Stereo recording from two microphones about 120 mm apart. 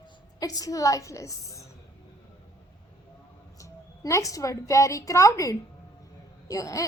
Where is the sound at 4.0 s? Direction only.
25° left (ahead or behind).